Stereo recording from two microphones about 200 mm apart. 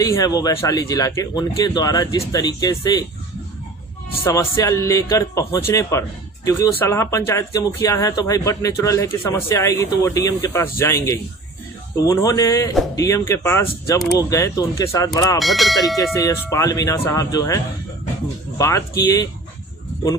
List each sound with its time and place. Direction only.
0.0 s speech: 20° left (ahead or behind)
4.2 s speech: 15° left (ahead or behind)
15.4 s speech: centre (ahead or behind)
16.5 s speech: 15° left (ahead or behind)